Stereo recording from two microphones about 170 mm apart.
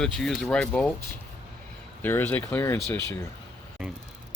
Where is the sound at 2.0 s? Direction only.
15° left (ahead or behind).